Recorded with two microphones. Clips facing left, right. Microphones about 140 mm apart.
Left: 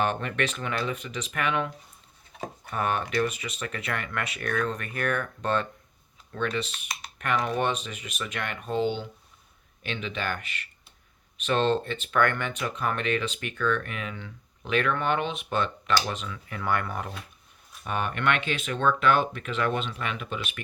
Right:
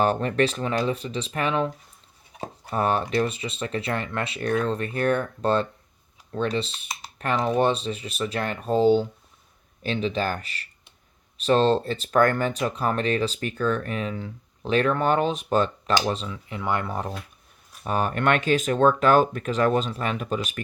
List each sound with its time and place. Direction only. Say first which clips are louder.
0.0 s speech: right 6 dB; 35° right (ahead or behind)